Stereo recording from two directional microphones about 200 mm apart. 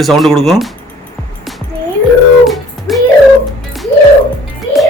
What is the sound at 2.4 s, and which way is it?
Music, centre (ahead or behind).